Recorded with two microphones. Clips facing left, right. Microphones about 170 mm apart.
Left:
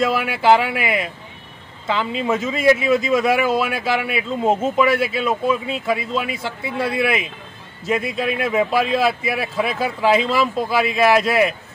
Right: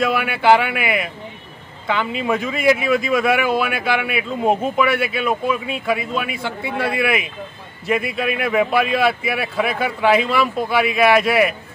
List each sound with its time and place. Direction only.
0.0 s a man's voice: 25° left (ahead or behind)
4.5 s speech: 15° right (ahead or behind)
4.7 s a man's voice: 25° left (ahead or behind)